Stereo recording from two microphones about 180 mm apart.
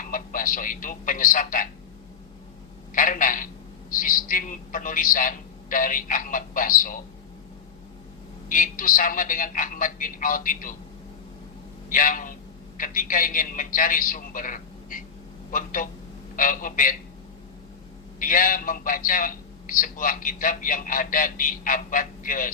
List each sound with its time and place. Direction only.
0.0 s a man's voice: 50° left (ahead or behind)
2.9 s a man's voice: 50° left (ahead or behind)
8.4 s a man's voice: 50° left (ahead or behind)
11.9 s a man's voice: 50° left (ahead or behind)
18.2 s a man's voice: 50° left (ahead or behind)